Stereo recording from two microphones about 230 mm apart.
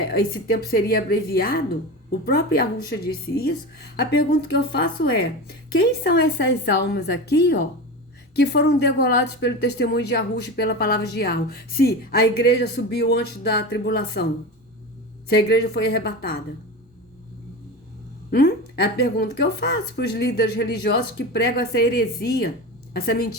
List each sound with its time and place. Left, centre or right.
0.1 s a woman's voice: left
15.3 s a woman's voice: left
18.3 s a woman's voice: left